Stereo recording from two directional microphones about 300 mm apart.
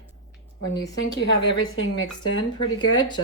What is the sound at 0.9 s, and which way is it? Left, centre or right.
A woman's voice, left.